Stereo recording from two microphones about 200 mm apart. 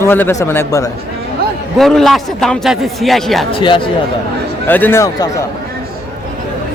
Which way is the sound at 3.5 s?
25° left (ahead or behind).